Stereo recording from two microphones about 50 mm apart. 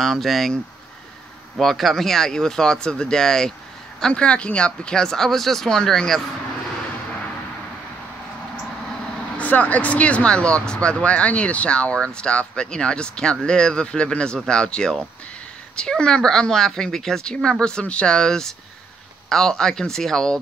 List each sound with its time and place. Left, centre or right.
0.0 s speech: centre
1.6 s speech: centre
4.1 s speech: left; by 6.2 s centre
9.4 s speech: left; by 20.3 s centre